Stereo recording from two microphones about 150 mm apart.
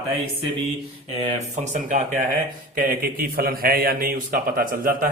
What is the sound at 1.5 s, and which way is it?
Speech, 55° right (ahead or behind).